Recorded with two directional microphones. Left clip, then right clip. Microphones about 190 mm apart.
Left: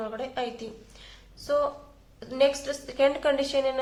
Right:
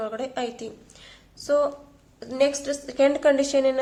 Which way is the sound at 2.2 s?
25° right (ahead or behind).